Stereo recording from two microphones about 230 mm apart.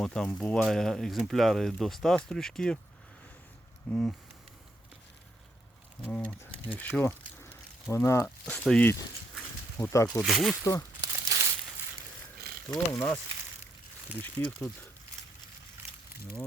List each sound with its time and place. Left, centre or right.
0.0 s speech: centre
3.9 s speech: centre
6.0 s speech: centre
10.6 s speech: centre
11.1 s crumpling: centre
12.6 s speech: centre
14.2 s speech: centre